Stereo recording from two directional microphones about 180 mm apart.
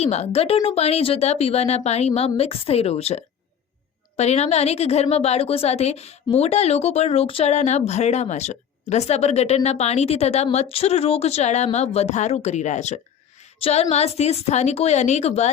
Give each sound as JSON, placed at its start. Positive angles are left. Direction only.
{"t": 0.0, "sound": "speech", "side_deg": 35}